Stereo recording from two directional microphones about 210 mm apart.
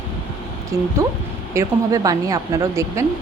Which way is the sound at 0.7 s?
15° right (ahead or behind).